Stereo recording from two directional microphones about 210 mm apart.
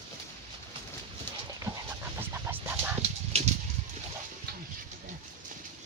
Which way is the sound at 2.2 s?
10° right (ahead or behind).